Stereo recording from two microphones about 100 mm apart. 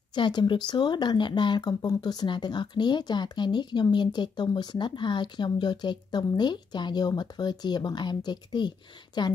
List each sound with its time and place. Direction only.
0.1 s speech: 50° left (ahead or behind)